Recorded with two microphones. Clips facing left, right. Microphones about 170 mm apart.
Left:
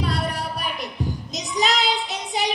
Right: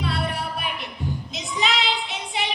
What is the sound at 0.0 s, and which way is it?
Music, 40° left (ahead or behind).